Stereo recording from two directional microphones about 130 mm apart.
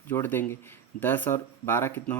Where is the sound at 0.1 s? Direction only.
15° left (ahead or behind).